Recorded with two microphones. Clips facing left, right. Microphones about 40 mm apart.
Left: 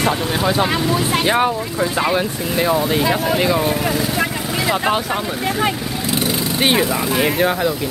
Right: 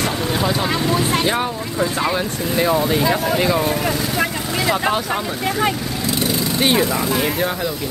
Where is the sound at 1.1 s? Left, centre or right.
Centre.